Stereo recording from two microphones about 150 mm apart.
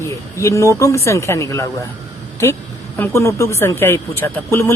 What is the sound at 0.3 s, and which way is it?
A man's voice, 20° left (ahead or behind).